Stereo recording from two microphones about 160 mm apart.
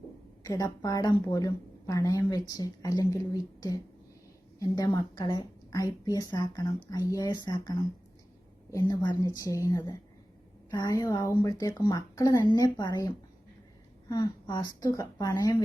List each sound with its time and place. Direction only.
0.4 s a woman's voice: 25° left (ahead or behind)
4.6 s a woman's voice: 25° left (ahead or behind)